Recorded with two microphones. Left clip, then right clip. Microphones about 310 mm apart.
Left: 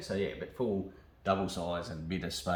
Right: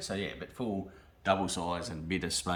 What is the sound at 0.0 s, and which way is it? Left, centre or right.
Speech, centre.